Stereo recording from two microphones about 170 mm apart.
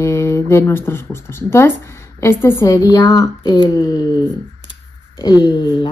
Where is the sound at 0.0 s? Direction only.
15° left (ahead or behind).